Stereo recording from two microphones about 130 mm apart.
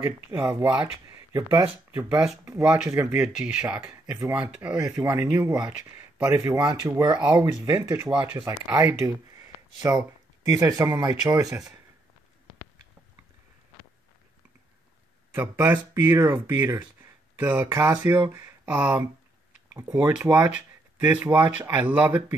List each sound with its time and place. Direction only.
0.0 s speech: 15° right (ahead or behind)
15.3 s speech: 15° right (ahead or behind)